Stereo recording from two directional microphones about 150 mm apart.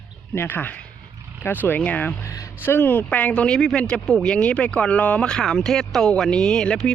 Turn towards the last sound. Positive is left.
turn(degrees=5)  # may be behind; listen again after turning